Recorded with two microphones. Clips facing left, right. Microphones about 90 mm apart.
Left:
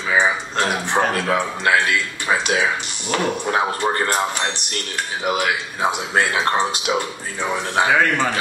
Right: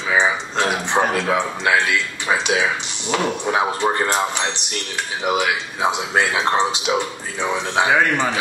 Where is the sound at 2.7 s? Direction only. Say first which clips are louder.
Right 1 dB; 20° right (ahead or behind).